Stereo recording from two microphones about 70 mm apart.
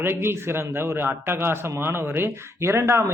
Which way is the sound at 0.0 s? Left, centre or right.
Right.